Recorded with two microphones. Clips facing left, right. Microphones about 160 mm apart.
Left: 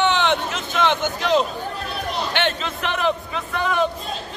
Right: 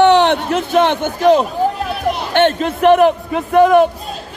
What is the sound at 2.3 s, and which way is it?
Speech, 50° right (ahead or behind).